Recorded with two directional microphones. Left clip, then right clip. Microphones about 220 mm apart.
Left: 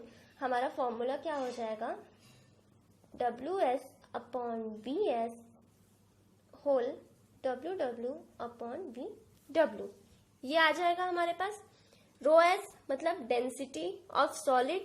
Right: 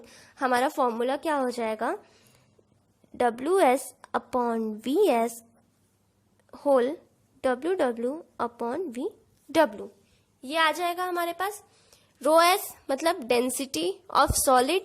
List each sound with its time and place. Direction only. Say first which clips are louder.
0.3 s a woman's voice: right 9 dB; 45° right (ahead or behind)
3.2 s a woman's voice: right 10 dB; 45° right (ahead or behind)
6.5 s a sound: right 8 dB; 50° right (ahead or behind)
7.4 s a woman's voice: right 10 dB; 45° right (ahead or behind)
10.4 s a woman's voice: right 3 dB; 20° right (ahead or behind); by 14.8 s 40° right (ahead or behind)